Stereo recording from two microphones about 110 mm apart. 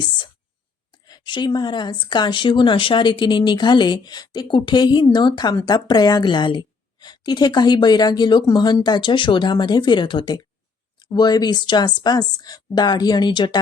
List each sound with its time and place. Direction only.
1.0 s a woman's voice: 40° left (ahead or behind)